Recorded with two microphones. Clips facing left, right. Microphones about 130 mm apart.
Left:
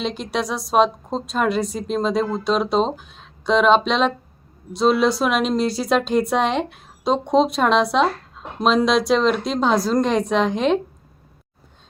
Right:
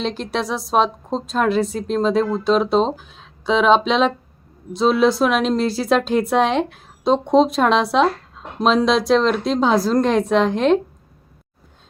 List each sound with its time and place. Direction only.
0.0 s a woman's voice: centre (ahead or behind)